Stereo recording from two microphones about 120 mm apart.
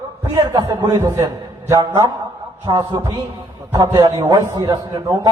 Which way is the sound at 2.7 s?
45° right (ahead or behind).